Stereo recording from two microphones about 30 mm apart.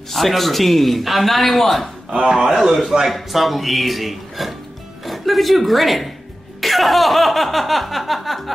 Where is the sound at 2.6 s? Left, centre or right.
Centre.